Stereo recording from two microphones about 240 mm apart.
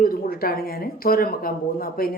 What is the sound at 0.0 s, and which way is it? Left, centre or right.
A woman's voice, left.